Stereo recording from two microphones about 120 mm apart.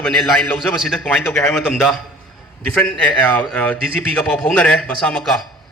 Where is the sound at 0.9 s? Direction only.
10° left (ahead or behind).